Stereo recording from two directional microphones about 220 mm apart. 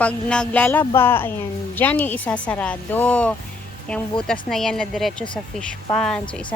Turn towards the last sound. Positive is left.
turn(degrees=5)  # may be behind; listen again after turning